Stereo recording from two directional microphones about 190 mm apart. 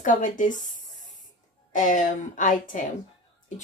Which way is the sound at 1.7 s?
40° left (ahead or behind).